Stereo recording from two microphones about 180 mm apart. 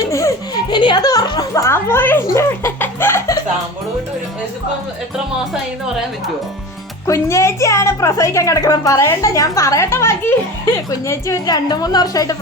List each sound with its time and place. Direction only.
0.1 s music: 15° left (ahead or behind)
7.1 s a woman's voice: 15° left (ahead or behind)